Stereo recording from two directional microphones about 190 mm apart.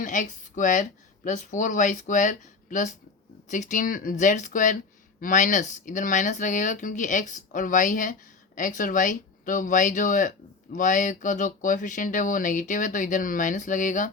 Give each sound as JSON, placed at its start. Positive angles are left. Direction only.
{"t": 0.0, "sound": "speech", "side_deg": 40}